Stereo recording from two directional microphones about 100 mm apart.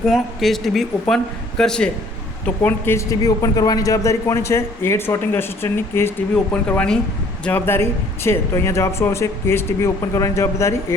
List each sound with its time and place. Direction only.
0.1 s speech: centre (ahead or behind)
2.6 s speech: 25° left (ahead or behind)
6.3 s speech: 10° left (ahead or behind)
7.4 s speech: 20° left (ahead or behind)